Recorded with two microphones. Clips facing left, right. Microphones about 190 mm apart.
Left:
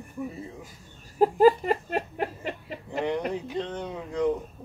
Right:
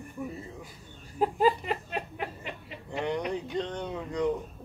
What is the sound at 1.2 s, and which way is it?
Speech, 40° left (ahead or behind).